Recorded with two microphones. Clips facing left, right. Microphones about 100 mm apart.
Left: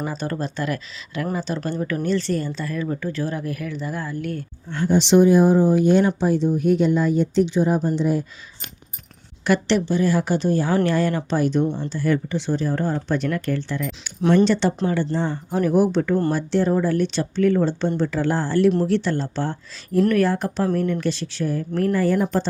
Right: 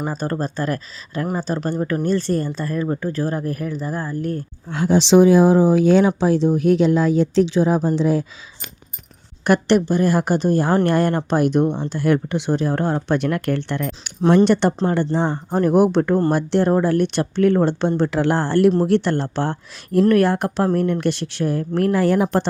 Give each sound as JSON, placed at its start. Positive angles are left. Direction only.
{"t": 0.1, "sound": "a woman's voice", "side_deg": -40}
{"t": 4.7, "sound": "speech", "side_deg": -90}
{"t": 9.4, "sound": "a woman's voice", "side_deg": -50}
{"t": 14.2, "sound": "speech", "side_deg": -35}
{"t": 14.4, "sound": "speech", "side_deg": -55}
{"t": 15.4, "sound": "a woman's voice", "side_deg": -50}